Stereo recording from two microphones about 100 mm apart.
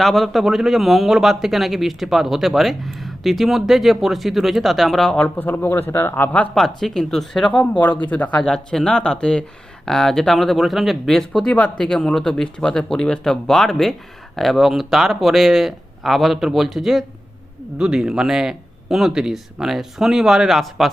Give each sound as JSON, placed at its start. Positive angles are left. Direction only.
{"t": 0.0, "sound": "a man's voice", "side_deg": 0}
{"t": 6.5, "sound": "a man's voice", "side_deg": 5}
{"t": 7.5, "sound": "a man's voice", "side_deg": 15}